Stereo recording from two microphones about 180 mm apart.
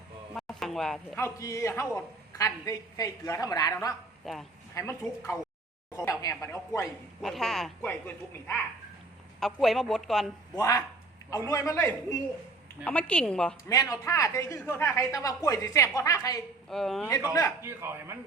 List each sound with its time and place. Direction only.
0.3 s a sound: centre (ahead or behind)
1.2 s a woman's voice: 20° left (ahead or behind)
4.2 s speech: centre (ahead or behind)
4.7 s speech: 15° left (ahead or behind)
7.2 s speech: centre (ahead or behind)
9.4 s speech: centre (ahead or behind)
10.6 s a woman's voice: 20° left (ahead or behind)
13.7 s a woman's voice: 20° left (ahead or behind)
16.6 s speech: centre (ahead or behind)
17.6 s a man's voice: 15° right (ahead or behind)